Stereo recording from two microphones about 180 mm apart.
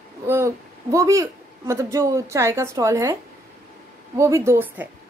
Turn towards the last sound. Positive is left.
turn(degrees=-10)  # may be behind; listen again after turning